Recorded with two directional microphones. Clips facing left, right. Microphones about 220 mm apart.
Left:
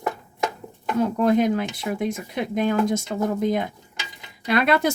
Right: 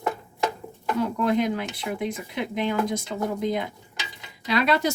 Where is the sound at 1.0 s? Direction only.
45° left (ahead or behind).